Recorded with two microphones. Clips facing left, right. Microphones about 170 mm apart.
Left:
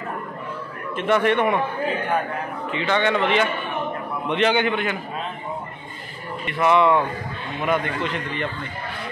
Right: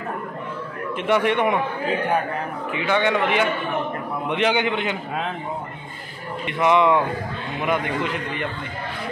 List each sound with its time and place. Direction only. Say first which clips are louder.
0.9 s a man's voice: left 1 dB; 15° right (ahead or behind)
2.7 s a man's voice: even; 10° right (ahead or behind)
6.4 s a man's voice: even; 15° right (ahead or behind)